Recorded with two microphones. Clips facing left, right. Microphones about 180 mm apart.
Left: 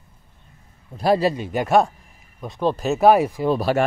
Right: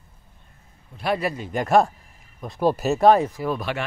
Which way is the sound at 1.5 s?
Centre (ahead or behind).